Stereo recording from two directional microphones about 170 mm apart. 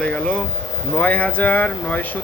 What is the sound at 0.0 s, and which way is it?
Speech, 5° left (ahead or behind).